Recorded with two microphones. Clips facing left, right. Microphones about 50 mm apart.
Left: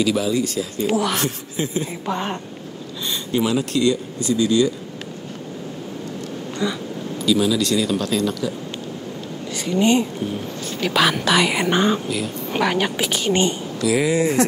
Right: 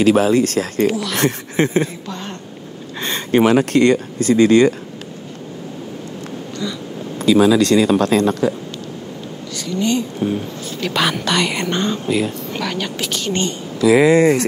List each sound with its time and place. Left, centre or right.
0.0 s speech: right
0.8 s speech: left
1.1 s speech: right
2.0 s speech: left
3.1 s speech: right
6.6 s speech: centre
7.2 s speech: right
9.7 s speech: left
10.8 s speech: centre
13.8 s speech: right